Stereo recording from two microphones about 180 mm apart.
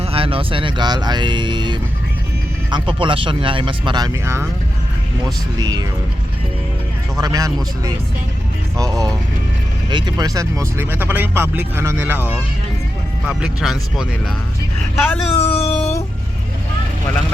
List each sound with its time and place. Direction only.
0.0 s speech: 30° right (ahead or behind)
5.5 s speech: 20° right (ahead or behind)
7.2 s speech: 20° right (ahead or behind); by 14.3 s centre (ahead or behind)
14.9 s speech: 10° left (ahead or behind)
15.4 s a sound: 30° left (ahead or behind)
15.8 s music: 15° left (ahead or behind)